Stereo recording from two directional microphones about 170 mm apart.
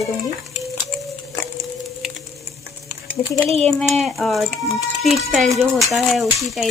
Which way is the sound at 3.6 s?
5° left (ahead or behind).